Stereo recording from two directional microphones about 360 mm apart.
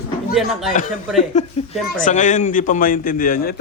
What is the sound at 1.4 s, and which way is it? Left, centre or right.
A man's voice, centre.